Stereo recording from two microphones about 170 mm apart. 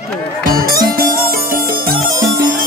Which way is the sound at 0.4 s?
55° right (ahead or behind).